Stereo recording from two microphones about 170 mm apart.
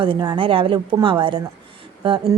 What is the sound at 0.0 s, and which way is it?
Speech, 30° right (ahead or behind).